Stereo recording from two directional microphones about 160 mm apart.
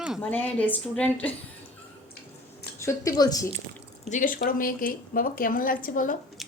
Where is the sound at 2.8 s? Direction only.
20° left (ahead or behind).